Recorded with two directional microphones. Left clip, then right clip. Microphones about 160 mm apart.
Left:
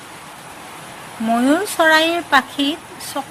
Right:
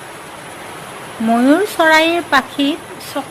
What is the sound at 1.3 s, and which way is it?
Speech, 30° left (ahead or behind).